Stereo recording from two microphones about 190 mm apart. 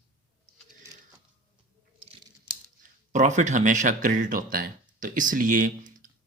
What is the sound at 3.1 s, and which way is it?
Speech, 40° right (ahead or behind).